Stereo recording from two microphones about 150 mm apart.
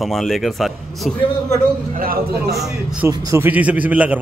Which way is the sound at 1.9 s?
75° right (ahead or behind).